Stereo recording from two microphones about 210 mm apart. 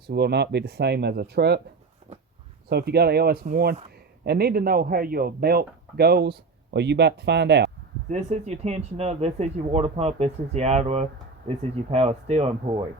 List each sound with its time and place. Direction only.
0.1 s a man's voice: 50° right (ahead or behind)
2.1 s a sound: 30° right (ahead or behind)
2.6 s a man's voice: 50° right (ahead or behind)
8.1 s speech: 30° right (ahead or behind)